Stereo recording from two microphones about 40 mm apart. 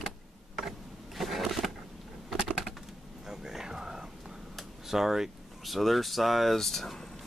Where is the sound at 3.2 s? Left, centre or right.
Centre.